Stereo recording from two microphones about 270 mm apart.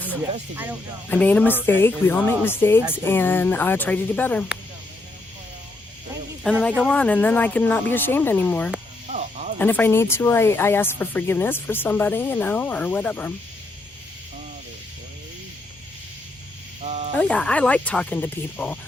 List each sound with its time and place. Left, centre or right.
0.5 s speech: centre
1.1 s speech: centre
6.4 s speech: centre
9.0 s snake: right
9.6 s speech: centre
16.8 s a sound: right
17.2 s speech: centre